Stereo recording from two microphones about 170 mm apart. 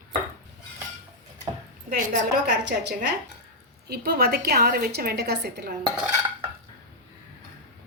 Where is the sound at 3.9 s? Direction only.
65° right (ahead or behind).